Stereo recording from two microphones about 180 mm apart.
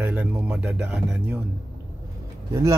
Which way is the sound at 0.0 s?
5° right (ahead or behind).